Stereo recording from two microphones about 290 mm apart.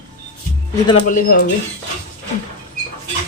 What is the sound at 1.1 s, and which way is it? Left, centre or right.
Speech, left.